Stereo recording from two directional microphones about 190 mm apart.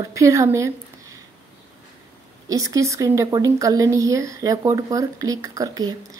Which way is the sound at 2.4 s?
15° right (ahead or behind).